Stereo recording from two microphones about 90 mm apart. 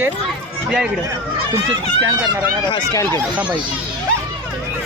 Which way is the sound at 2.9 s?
30° left (ahead or behind).